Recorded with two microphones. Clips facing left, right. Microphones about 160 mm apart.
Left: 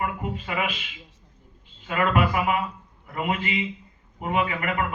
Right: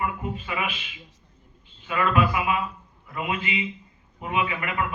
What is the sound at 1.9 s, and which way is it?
A man's voice, 40° left (ahead or behind).